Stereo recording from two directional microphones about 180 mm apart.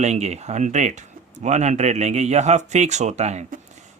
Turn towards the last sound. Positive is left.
turn(degrees=-40)  # may be behind; listen again after turning